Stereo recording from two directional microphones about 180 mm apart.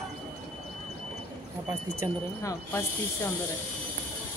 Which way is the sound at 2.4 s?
15° left (ahead or behind).